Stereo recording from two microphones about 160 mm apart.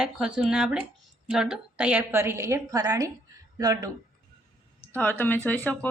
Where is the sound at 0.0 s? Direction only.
5° right (ahead or behind); by 3.8 s 20° right (ahead or behind).